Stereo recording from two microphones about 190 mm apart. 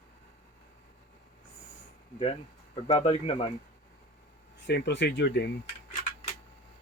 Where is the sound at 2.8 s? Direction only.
30° left (ahead or behind).